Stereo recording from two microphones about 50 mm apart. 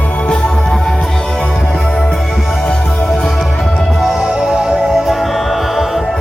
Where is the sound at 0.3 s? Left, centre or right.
Centre.